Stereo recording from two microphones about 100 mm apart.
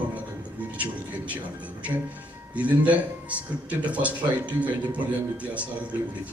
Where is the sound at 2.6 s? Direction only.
15° right (ahead or behind).